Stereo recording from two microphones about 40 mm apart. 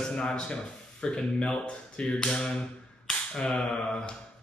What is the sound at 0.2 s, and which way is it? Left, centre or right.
Speech, left.